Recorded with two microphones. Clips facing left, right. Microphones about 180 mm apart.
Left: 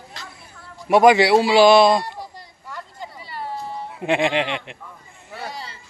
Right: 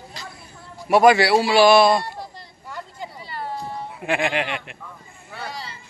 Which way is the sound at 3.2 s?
5° left (ahead or behind).